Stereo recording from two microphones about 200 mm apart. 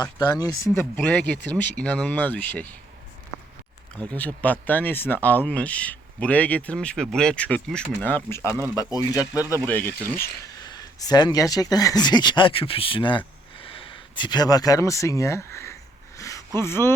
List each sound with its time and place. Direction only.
0.2 s speech: 20° left (ahead or behind)
4.1 s speech: 5° left (ahead or behind)
10.2 s speech: 20° left (ahead or behind)
16.1 s a sound: 15° left (ahead or behind)
16.6 s speech: 10° left (ahead or behind)